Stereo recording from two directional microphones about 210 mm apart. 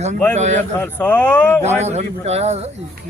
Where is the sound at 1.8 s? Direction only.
30° right (ahead or behind).